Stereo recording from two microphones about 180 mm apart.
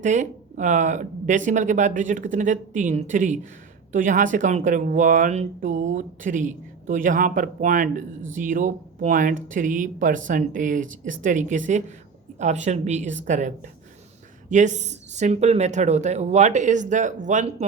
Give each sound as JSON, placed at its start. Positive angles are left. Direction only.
{"t": 0.0, "sound": "speech", "side_deg": -45}